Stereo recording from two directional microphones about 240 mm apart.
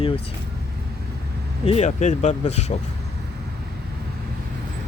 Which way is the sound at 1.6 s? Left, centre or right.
Left.